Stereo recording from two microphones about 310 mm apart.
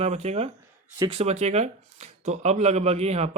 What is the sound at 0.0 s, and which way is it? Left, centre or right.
Speech, right.